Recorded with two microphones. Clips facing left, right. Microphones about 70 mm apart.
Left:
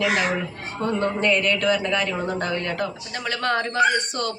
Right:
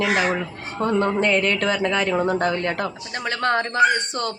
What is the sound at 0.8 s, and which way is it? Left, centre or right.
Speech, right.